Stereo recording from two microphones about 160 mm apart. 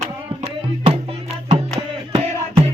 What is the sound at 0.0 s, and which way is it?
Music, 40° right (ahead or behind).